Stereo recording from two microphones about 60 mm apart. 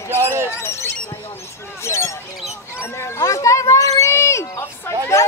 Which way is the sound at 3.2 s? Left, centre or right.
Left.